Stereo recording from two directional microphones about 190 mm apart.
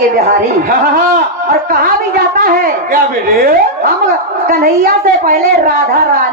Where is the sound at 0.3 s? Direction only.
50° right (ahead or behind).